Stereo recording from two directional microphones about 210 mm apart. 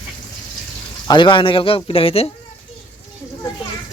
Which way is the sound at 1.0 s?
20° left (ahead or behind).